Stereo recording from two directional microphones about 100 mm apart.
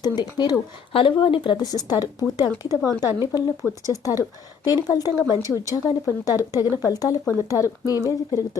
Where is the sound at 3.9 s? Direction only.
35° left (ahead or behind).